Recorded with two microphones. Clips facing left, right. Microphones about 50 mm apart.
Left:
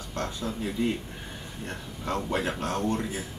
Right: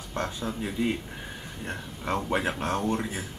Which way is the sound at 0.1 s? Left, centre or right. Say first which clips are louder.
Right 1 dB; centre.